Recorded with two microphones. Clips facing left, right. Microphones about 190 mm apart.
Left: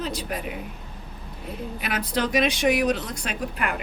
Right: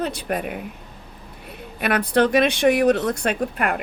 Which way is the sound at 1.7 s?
60° right (ahead or behind).